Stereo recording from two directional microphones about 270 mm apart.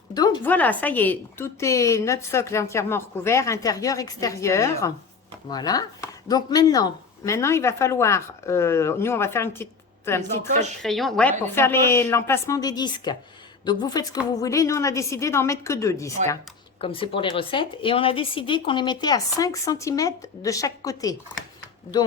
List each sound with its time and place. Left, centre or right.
0.1 s speech: centre